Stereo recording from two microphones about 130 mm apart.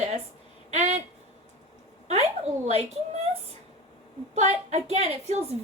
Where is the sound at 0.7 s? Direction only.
60° right (ahead or behind).